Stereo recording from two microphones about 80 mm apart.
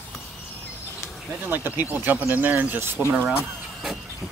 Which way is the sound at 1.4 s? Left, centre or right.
Right.